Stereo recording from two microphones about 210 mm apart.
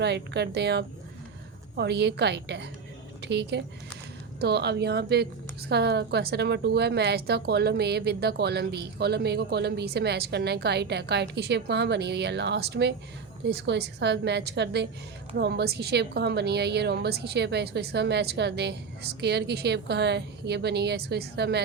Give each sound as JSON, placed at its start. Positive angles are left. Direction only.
{"t": 0.0, "sound": "a woman's voice", "side_deg": -55}